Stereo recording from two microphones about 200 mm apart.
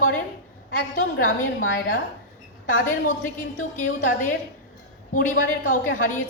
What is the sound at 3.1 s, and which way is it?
A woman's voice, 40° left (ahead or behind).